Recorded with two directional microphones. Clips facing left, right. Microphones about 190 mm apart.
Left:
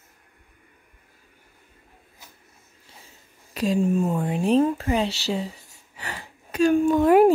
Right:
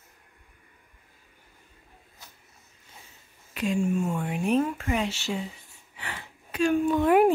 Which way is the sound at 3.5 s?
35° left (ahead or behind).